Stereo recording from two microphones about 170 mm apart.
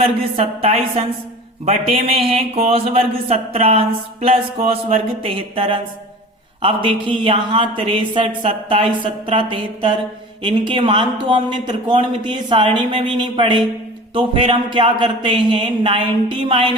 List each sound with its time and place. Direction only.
0.0 s a man's voice: 35° right (ahead or behind)